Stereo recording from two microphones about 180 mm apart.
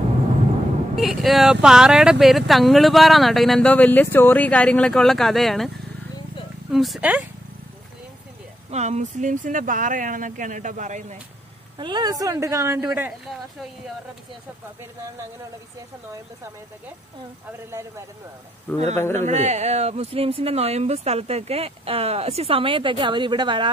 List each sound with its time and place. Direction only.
0.9 s speech: centre (ahead or behind)
6.7 s speech: centre (ahead or behind)
8.6 s speech: 40° right (ahead or behind)
11.8 s speech: 25° right (ahead or behind)
13.3 s speech: centre (ahead or behind)
17.5 s speech: 15° right (ahead or behind)
18.9 s speech: 15° left (ahead or behind)
19.2 s speech: 40° right (ahead or behind)